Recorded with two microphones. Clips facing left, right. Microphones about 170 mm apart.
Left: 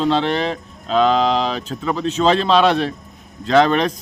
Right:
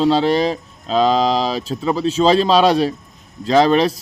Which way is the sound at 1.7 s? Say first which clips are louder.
Right 3 dB; 10° right (ahead or behind).